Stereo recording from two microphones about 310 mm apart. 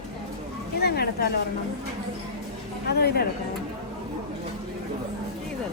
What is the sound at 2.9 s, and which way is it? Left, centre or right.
Speech, left.